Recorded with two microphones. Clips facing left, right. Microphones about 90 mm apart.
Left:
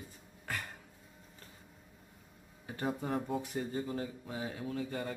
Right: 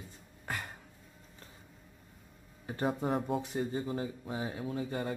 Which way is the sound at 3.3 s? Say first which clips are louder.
Right 2 dB; 20° right (ahead or behind).